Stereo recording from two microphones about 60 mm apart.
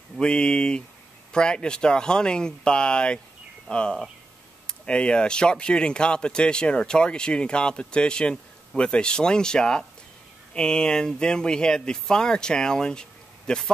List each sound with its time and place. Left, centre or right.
0.2 s speech: centre